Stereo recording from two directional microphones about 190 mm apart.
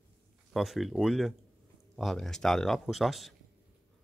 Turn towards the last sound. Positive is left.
turn(degrees=0)  # may be behind; listen again after turning